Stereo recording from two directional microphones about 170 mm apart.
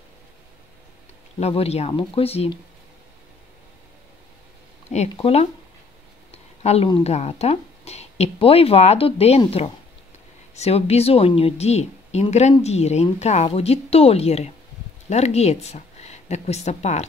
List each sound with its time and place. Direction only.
1.4 s a woman's voice: 35° left (ahead or behind)
5.1 s a woman's voice: 35° left (ahead or behind)
6.3 s a sound: 40° left (ahead or behind)
7.0 s a woman's voice: 40° left (ahead or behind)
10.5 s a woman's voice: 40° left (ahead or behind)